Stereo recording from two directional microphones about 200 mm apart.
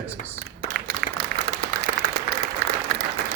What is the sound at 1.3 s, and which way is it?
Applause, 50° right (ahead or behind).